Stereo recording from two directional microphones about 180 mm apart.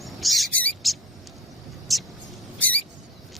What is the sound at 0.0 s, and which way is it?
Bird, centre (ahead or behind).